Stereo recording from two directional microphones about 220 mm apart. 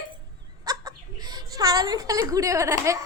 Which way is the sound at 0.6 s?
15° right (ahead or behind).